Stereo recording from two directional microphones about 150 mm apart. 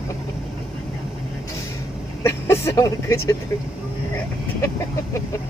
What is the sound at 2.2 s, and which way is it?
Vehicle, 20° left (ahead or behind).